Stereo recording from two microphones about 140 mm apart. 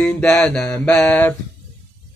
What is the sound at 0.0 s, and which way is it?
Speech, 5° left (ahead or behind).